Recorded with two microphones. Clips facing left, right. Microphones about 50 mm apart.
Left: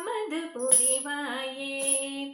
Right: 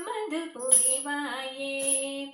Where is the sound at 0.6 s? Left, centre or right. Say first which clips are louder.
Left 3 dB; left.